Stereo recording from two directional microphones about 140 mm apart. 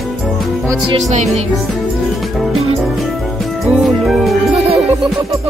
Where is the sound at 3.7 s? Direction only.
Centre (ahead or behind).